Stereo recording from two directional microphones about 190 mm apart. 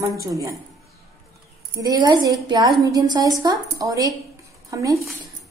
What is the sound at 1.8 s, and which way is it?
A woman's voice, 20° right (ahead or behind).